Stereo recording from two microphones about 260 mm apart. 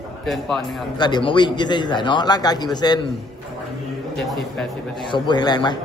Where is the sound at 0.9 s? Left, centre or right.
Centre.